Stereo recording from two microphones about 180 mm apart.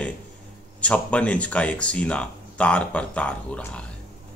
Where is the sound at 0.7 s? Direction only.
5° left (ahead or behind).